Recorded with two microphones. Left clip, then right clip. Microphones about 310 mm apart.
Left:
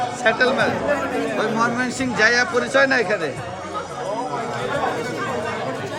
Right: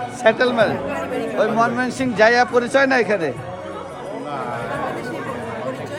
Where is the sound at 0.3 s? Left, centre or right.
Centre.